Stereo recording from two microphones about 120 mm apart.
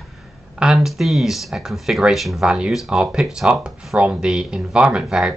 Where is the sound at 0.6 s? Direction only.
5° right (ahead or behind).